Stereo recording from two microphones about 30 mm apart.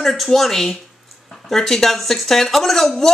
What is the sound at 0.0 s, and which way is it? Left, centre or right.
A woman's voice, centre.